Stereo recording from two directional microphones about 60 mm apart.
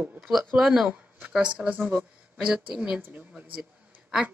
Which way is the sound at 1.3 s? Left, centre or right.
Centre.